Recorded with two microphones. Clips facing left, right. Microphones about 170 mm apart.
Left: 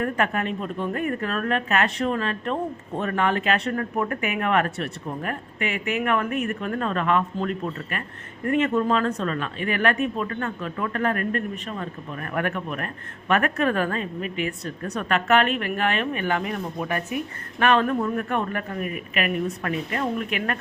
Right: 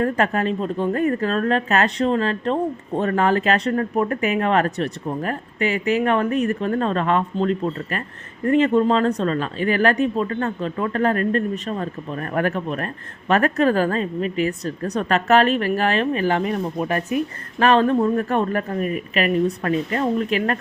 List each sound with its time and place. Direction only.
0.0 s speech: 30° right (ahead or behind)